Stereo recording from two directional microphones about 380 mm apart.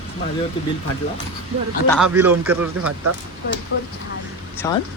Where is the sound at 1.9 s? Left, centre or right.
Centre.